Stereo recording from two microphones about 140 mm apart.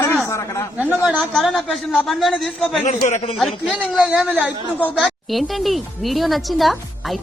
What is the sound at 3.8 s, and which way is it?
A man's voice, 5° right (ahead or behind).